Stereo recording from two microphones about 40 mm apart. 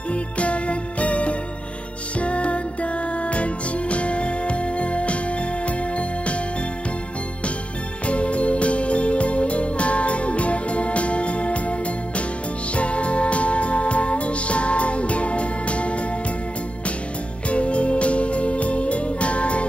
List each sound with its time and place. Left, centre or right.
0.1 s music: left
8.1 s music: left
17.5 s music: left